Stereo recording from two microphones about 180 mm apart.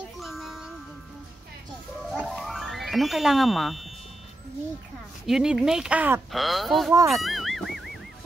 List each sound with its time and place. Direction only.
0.2 s music: centre (ahead or behind)
2.0 s music: centre (ahead or behind)
5.2 s speech: centre (ahead or behind)
6.9 s speech: 15° right (ahead or behind)
7.2 s music: centre (ahead or behind)